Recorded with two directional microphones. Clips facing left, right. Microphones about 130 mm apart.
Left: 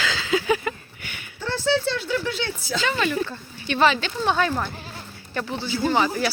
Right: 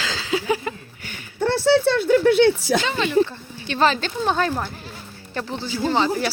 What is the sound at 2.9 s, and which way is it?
Speech, 20° right (ahead or behind).